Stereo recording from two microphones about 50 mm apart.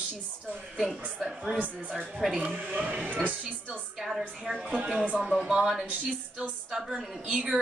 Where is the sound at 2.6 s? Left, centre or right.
Right.